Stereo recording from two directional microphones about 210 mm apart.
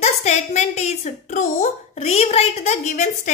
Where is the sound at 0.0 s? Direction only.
35° left (ahead or behind).